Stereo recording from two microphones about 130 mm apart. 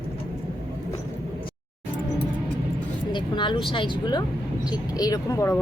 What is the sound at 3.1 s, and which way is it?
Speech, 35° left (ahead or behind).